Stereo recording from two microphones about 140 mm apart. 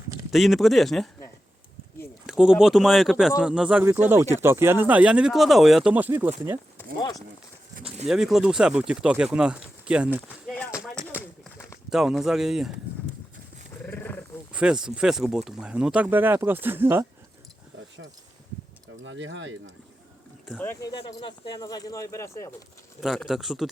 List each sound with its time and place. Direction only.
0.3 s speech: centre (ahead or behind)
2.2 s speech: 5° right (ahead or behind)
8.0 s speech: 5° right (ahead or behind)
10.2 s a sound: 10° left (ahead or behind)
11.9 s speech: centre (ahead or behind)
13.8 s wild animals: 10° left (ahead or behind)
14.5 s speech: 5° right (ahead or behind)
20.5 s speech: 5° right (ahead or behind)
20.8 s speech: 30° left (ahead or behind)
23.0 s speech: centre (ahead or behind)